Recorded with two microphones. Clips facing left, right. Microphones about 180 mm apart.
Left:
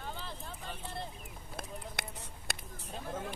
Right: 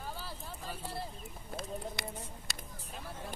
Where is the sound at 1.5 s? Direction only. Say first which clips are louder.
Right 3 dB; 55° left (ahead or behind).